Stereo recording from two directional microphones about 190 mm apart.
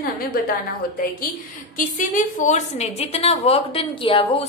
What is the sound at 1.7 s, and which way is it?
A woman's voice, 45° left (ahead or behind).